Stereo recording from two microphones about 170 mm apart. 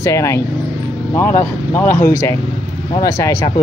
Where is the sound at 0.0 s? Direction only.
20° left (ahead or behind).